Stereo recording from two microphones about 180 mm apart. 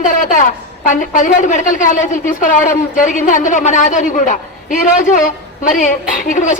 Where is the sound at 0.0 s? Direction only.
45° left (ahead or behind).